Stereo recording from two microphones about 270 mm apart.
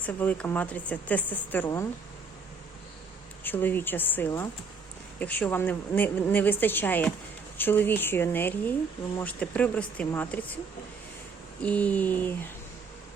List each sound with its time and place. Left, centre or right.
0.0 s a woman's voice: centre
3.4 s a woman's voice: centre
11.6 s speech: centre